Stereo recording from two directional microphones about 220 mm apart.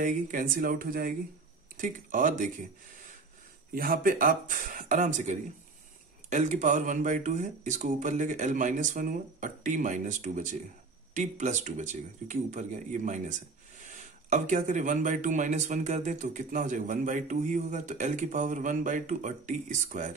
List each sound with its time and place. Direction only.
0.0 s speech: 35° right (ahead or behind)
3.7 s speech: 40° right (ahead or behind)